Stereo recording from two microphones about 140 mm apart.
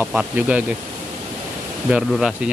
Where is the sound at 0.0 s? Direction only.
10° right (ahead or behind).